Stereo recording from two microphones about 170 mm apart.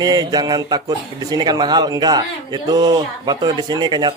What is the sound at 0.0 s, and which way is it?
A man's voice, 25° right (ahead or behind).